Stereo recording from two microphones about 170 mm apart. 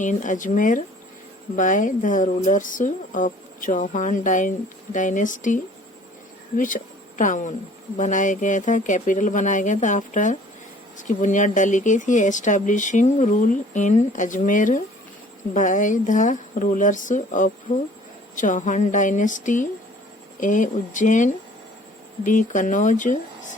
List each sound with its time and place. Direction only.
0.0 s a woman's voice: 45° left (ahead or behind)
6.6 s a woman's voice: 50° left (ahead or behind)